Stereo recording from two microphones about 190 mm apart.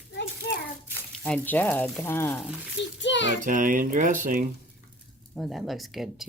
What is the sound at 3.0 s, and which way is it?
Child singing, 70° left (ahead or behind).